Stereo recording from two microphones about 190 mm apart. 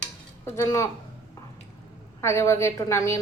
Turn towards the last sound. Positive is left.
turn(degrees=15)  # may be behind; listen again after turning